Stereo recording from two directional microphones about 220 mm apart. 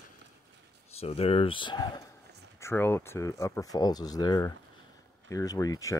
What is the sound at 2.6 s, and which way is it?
Speech, 10° left (ahead or behind).